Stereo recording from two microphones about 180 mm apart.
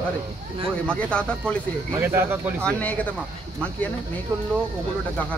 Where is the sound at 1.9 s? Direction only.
15° right (ahead or behind).